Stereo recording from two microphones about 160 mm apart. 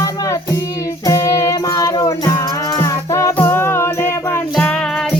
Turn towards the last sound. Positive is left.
turn(degrees=5)  # may be behind; listen again after turning